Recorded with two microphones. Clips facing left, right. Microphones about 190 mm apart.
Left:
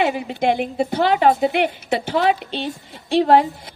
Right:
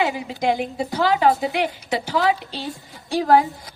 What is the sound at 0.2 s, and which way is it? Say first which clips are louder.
Speech: left 2 dB; 60° left (ahead or behind).